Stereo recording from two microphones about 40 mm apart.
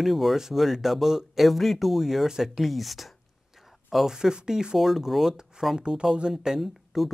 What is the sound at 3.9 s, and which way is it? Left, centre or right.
Speech, centre.